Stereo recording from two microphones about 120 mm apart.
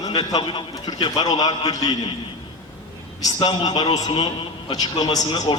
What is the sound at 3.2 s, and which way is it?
A man's voice, 35° left (ahead or behind).